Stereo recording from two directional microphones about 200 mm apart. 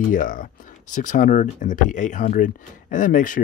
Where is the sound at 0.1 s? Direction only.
40° left (ahead or behind).